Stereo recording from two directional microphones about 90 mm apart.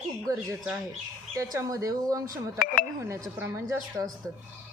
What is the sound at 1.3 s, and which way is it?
Speech, 35° right (ahead or behind).